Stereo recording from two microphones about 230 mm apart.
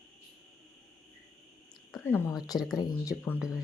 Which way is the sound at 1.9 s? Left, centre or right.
Centre.